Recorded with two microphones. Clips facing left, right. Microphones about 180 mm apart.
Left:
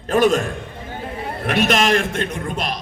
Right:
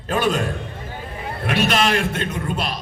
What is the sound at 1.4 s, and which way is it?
A man's voice, 45° left (ahead or behind).